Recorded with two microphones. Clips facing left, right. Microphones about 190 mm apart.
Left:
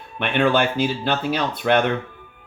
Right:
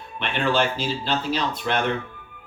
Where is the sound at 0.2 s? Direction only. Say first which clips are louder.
Left 4 dB; 55° left (ahead or behind).